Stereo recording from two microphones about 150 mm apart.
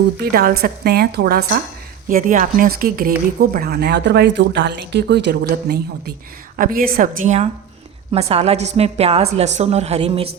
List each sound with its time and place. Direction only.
0.2 s speech: 85° right
2.0 s speech: 65° right (ahead or behind)
3.5 s speech: 85° right
6.6 s speech: 75° right (ahead or behind)
8.1 s a woman's voice: 40° right (ahead or behind)